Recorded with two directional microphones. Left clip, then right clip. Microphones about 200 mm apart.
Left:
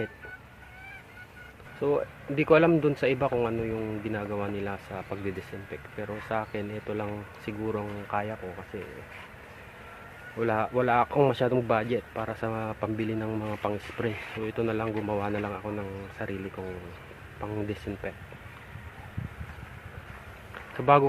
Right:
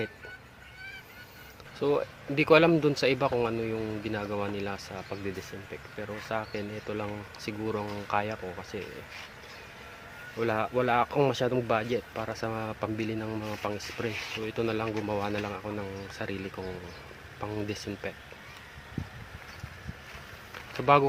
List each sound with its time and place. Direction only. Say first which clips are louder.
1.8 s speech: left 1 dB; 15° right (ahead or behind)
10.4 s speech: left 2 dB; 5° right (ahead or behind)
20.8 s speech: left 1 dB; 5° right (ahead or behind)